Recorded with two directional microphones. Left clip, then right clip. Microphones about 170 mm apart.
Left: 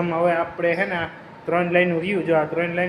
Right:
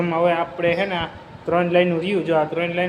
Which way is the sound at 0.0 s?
5° right (ahead or behind).